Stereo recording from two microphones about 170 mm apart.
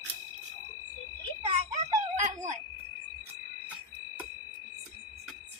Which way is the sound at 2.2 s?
45° right (ahead or behind).